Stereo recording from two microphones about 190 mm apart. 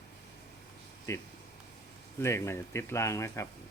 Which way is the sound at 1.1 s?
15° left (ahead or behind).